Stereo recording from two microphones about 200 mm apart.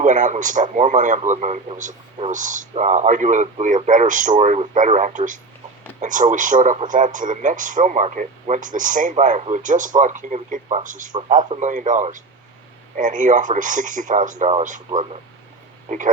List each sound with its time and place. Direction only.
0.0 s speech: 40° right (ahead or behind)